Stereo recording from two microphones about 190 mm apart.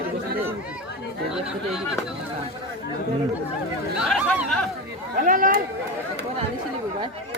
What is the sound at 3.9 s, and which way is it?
Speech, centre (ahead or behind).